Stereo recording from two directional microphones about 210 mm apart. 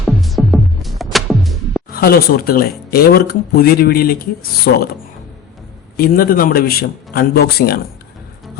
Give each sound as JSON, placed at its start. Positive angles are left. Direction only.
{"t": 0.0, "sound": "music", "side_deg": 0}
{"t": 1.9, "sound": "speech", "side_deg": 45}
{"t": 6.0, "sound": "speech", "side_deg": 45}